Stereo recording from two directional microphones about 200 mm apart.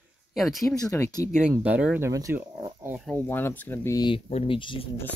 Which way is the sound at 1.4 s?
5° right (ahead or behind).